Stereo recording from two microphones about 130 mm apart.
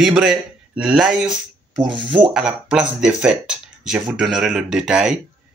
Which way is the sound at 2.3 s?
5° right (ahead or behind).